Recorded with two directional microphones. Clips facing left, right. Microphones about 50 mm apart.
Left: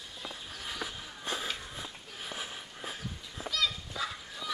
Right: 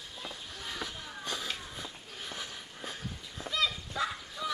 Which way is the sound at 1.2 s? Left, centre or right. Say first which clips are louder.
Left 2 dB; left.